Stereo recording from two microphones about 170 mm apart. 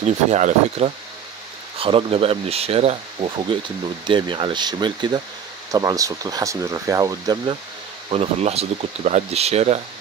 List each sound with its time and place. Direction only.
0.0 s speech: 40° right (ahead or behind); by 7.5 s 20° right (ahead or behind)
8.1 s speech: 35° right (ahead or behind)